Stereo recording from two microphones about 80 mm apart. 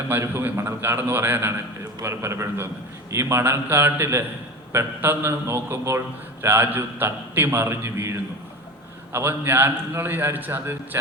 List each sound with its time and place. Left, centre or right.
0.1 s a man's voice: right